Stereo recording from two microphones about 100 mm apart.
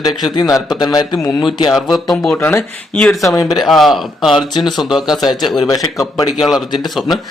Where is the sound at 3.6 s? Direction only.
Centre (ahead or behind).